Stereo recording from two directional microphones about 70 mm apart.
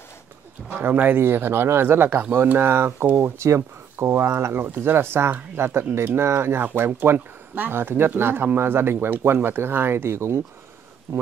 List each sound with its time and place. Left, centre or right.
0.7 s speech: right